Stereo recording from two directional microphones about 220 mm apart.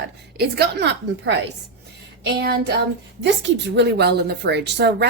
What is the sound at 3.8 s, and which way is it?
Speech, 50° right (ahead or behind).